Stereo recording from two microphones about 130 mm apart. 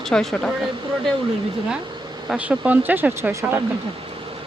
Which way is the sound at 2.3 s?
10° right (ahead or behind).